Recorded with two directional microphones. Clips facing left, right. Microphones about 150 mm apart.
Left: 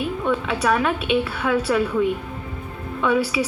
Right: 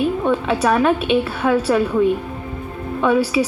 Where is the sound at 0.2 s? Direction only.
35° right (ahead or behind).